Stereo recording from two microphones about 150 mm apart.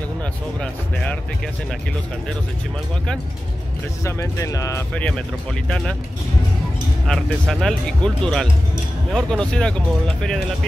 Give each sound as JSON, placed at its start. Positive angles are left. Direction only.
{"t": 0.2, "sound": "speech", "side_deg": 10}
{"t": 4.0, "sound": "speech", "side_deg": 20}
{"t": 4.9, "sound": "speech", "side_deg": 5}
{"t": 7.1, "sound": "speech", "side_deg": 0}